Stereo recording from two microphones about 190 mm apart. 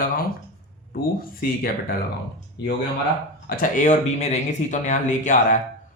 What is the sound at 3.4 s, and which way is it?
Speech, 40° left (ahead or behind).